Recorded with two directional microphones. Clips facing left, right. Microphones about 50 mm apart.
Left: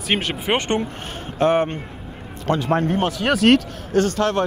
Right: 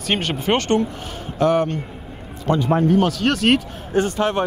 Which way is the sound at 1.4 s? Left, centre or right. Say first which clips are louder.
Even; left.